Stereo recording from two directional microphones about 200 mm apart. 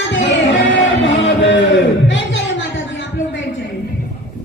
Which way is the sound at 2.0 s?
65° left (ahead or behind).